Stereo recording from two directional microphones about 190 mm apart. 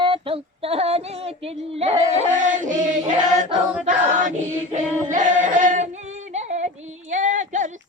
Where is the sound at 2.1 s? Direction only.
40° right (ahead or behind).